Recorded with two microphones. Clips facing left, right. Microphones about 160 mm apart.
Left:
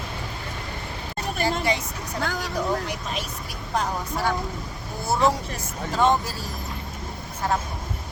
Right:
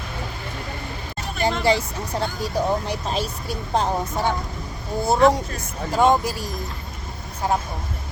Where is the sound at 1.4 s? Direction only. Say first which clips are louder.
Right 5 dB; 30° right (ahead or behind).